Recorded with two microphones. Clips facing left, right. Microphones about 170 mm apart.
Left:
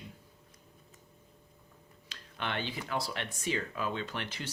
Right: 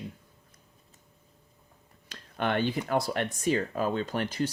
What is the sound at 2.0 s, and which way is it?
Speech, 45° right (ahead or behind).